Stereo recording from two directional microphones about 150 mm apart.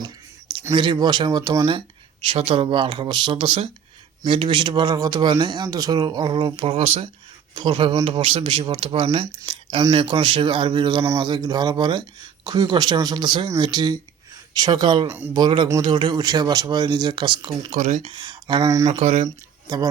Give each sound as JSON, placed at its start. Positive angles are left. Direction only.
{"t": 0.7, "sound": "speech", "side_deg": -30}
{"t": 17.7, "sound": "speech", "side_deg": -55}
{"t": 18.0, "sound": "speech", "side_deg": -30}
{"t": 18.9, "sound": "speech", "side_deg": -45}